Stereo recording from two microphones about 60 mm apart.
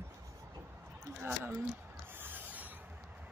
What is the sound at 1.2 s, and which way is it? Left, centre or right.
Speech, right.